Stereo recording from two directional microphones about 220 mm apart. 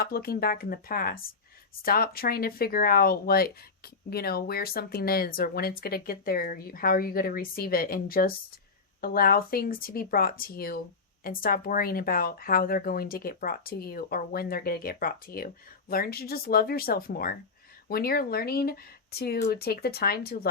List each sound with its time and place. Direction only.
0.0 s speech: 45° left (ahead or behind)